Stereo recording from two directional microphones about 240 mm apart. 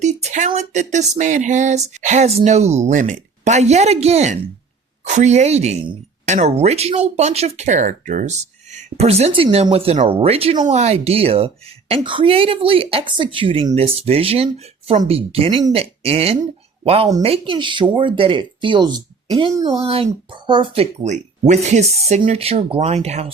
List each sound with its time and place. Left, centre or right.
0.0 s speech: right